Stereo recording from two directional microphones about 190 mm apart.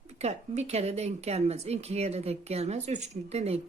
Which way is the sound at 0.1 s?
35° right (ahead or behind).